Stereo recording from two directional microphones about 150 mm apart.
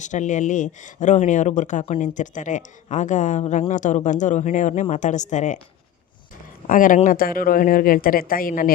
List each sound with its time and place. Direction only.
0.0 s speech: 55° left (ahead or behind)
6.7 s speech: 65° left (ahead or behind)